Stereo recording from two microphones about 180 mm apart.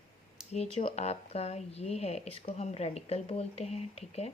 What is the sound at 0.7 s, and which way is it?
Speech, 35° left (ahead or behind).